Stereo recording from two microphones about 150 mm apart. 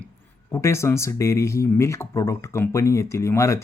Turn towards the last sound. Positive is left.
turn(degrees=20)  # may be behind; listen again after turning